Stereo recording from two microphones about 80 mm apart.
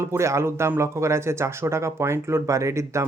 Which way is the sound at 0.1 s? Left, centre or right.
Right.